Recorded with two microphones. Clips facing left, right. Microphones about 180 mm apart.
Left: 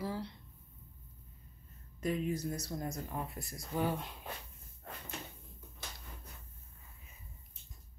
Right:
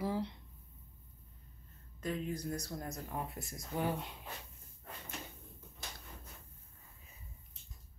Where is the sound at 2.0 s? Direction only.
10° left (ahead or behind).